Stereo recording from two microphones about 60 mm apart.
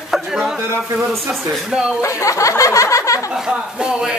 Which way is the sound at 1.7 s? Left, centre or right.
Centre.